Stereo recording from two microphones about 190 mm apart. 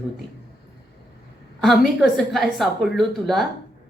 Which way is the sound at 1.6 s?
Centre (ahead or behind).